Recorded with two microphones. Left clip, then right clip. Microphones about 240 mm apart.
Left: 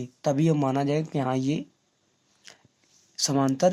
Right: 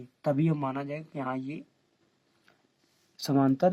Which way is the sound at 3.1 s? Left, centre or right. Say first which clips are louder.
Left 2 dB; left.